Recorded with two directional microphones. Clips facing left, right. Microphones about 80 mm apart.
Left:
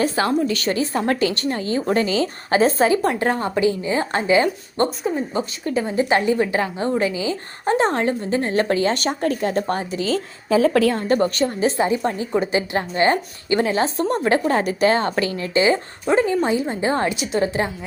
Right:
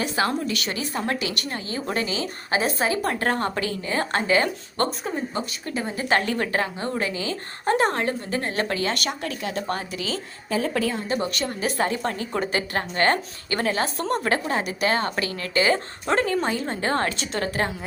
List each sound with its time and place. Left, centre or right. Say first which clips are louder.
0.4 s a woman's voice: left 7 dB; left
11.4 s speech: left 5 dB; centre
14.5 s a woman's voice: left 6 dB; left; by 17.5 s centre